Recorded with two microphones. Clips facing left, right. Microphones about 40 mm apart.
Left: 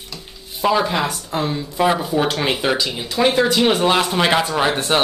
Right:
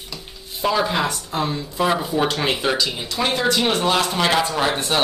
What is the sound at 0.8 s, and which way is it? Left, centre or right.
A man's voice, centre.